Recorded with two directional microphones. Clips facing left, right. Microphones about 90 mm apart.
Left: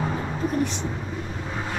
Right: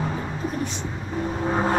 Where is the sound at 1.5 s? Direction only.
45° right (ahead or behind).